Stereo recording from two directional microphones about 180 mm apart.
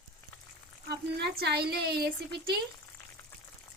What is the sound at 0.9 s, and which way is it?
A woman's voice, 65° right (ahead or behind).